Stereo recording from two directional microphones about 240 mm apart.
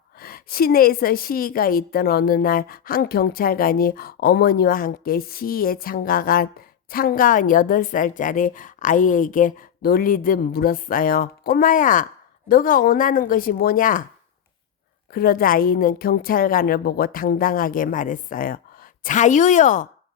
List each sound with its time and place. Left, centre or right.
0.2 s a woman's voice: left
15.1 s a woman's voice: left